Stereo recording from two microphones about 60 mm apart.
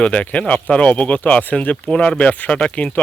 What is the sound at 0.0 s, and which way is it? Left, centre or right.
Speech, left.